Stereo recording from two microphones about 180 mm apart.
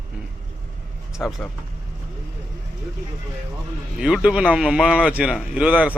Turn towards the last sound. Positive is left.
turn(degrees=-10)  # may be behind; listen again after turning